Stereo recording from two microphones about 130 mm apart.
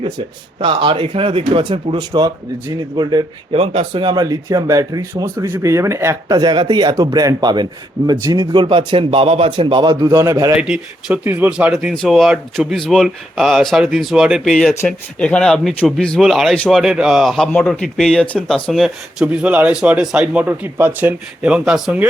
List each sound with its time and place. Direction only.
0.6 s speech: 40° right (ahead or behind)
3.5 s speech: 50° right (ahead or behind)
4.0 s speech: 30° right (ahead or behind)
10.6 s speech: 10° right (ahead or behind)